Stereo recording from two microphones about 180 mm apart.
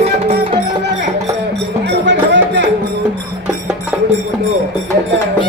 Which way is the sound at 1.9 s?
90° right.